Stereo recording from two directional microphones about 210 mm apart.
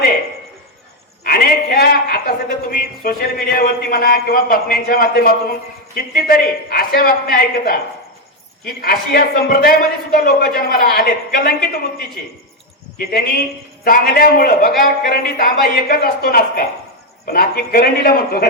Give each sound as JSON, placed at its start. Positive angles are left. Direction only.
{"t": 1.2, "sound": "a woman's voice", "side_deg": 45}
{"t": 13.1, "sound": "a woman's voice", "side_deg": 45}